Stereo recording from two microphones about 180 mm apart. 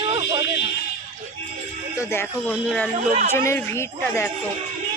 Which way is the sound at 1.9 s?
15° left (ahead or behind).